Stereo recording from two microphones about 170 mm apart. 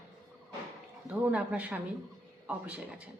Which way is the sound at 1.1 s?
10° right (ahead or behind).